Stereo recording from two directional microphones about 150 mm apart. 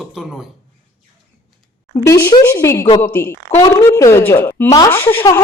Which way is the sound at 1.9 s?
20° left (ahead or behind).